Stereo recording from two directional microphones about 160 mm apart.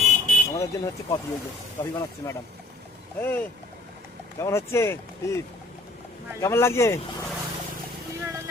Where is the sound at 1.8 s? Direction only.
20° left (ahead or behind).